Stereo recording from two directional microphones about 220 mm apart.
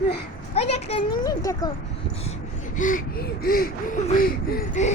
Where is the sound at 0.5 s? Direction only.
30° left (ahead or behind).